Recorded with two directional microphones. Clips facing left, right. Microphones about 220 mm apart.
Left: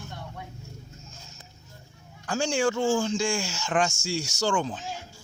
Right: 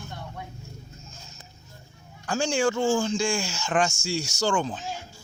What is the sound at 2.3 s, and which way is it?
Speech, 40° right (ahead or behind).